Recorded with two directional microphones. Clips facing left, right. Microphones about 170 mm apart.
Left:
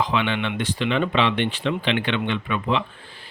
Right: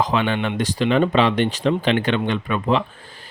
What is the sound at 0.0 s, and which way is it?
Speech, 40° right (ahead or behind).